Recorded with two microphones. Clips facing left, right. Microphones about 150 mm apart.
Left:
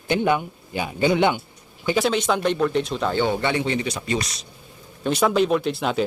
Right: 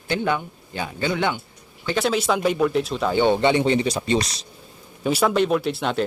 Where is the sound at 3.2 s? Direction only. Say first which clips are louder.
Right 6 dB; 20° right (ahead or behind).